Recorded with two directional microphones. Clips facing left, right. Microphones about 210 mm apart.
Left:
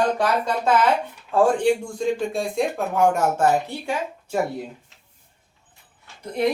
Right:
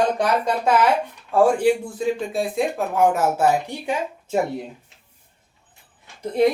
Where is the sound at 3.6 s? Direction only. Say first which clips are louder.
Right 1 dB; 15° right (ahead or behind).